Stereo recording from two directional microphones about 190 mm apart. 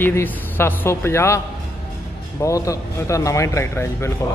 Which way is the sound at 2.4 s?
15° left (ahead or behind).